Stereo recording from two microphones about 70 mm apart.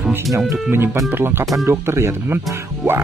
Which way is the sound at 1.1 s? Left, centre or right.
Right.